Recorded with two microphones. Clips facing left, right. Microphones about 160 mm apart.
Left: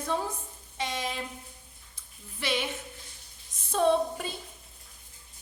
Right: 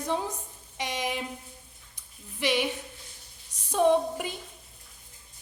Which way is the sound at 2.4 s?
15° right (ahead or behind).